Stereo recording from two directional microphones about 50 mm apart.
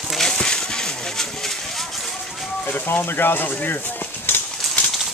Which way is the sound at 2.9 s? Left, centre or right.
Left.